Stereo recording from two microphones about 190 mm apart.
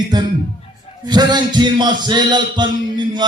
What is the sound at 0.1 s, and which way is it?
Speech, 20° right (ahead or behind).